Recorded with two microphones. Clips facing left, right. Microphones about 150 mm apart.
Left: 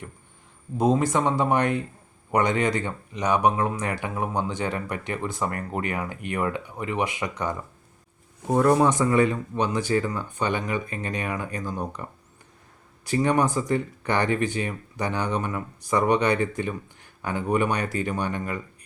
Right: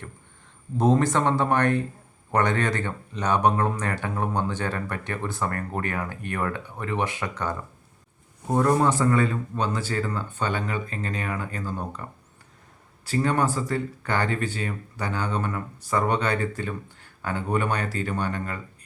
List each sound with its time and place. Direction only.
0.8 s speech: 10° left (ahead or behind)
8.6 s speech: 15° left (ahead or behind)
13.1 s speech: 15° left (ahead or behind)